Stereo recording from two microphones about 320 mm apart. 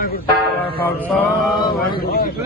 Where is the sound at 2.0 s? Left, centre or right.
Left.